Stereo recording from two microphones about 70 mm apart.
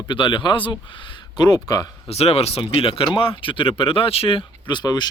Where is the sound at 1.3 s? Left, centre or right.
Left.